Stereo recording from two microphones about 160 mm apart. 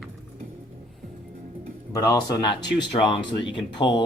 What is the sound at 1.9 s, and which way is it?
Speech, 20° left (ahead or behind).